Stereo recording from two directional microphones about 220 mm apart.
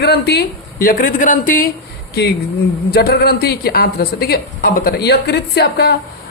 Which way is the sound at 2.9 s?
45° left (ahead or behind).